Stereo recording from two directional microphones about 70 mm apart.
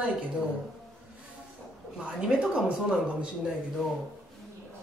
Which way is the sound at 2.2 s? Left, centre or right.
Centre.